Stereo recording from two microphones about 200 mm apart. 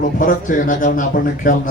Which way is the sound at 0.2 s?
40° left (ahead or behind).